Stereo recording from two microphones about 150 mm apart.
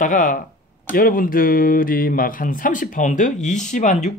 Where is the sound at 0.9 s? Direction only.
70° left (ahead or behind).